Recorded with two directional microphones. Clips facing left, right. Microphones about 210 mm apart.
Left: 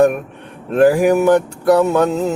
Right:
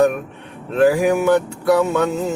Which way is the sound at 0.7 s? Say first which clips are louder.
Left 3 dB; 45° left (ahead or behind).